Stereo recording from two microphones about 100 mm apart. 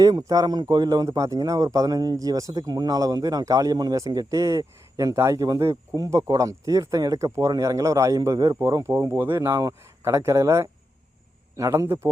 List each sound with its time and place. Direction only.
0.0 s speech: 40° right (ahead or behind)